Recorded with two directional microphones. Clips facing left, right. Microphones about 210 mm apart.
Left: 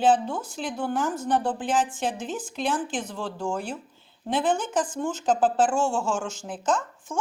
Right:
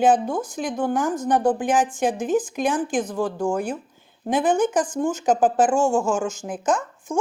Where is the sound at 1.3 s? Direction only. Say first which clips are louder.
Right 5 dB; 10° right (ahead or behind).